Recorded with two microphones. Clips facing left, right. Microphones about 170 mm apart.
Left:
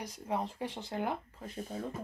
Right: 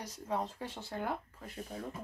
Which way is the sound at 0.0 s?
15° left (ahead or behind).